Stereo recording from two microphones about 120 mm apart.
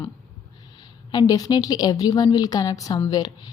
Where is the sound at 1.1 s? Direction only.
35° left (ahead or behind).